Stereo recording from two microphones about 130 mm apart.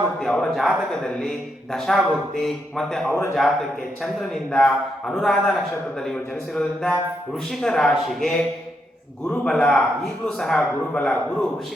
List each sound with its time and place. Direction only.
0.2 s a man's voice: 5° left (ahead or behind)
3.1 s a man's voice: 20° left (ahead or behind)
4.0 s a man's voice: 5° left (ahead or behind)